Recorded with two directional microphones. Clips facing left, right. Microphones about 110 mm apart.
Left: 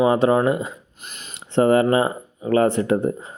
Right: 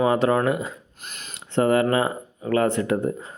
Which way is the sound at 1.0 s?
10° left (ahead or behind).